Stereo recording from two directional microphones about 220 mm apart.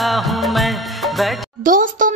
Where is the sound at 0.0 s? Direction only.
Centre (ahead or behind).